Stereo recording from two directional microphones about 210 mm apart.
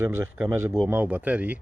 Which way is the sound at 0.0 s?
10° right (ahead or behind).